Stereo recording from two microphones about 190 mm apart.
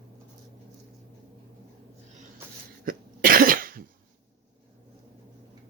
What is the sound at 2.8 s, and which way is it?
Cough, 50° right (ahead or behind).